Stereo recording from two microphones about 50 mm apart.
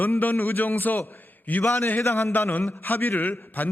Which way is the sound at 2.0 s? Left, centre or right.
Left.